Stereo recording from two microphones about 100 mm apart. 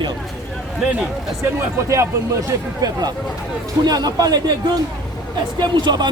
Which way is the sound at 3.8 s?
40° right (ahead or behind).